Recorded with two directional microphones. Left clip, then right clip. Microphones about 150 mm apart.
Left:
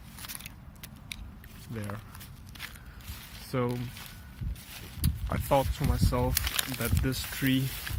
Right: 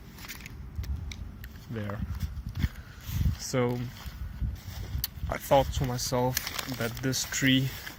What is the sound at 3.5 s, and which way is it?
Speech, 5° left (ahead or behind).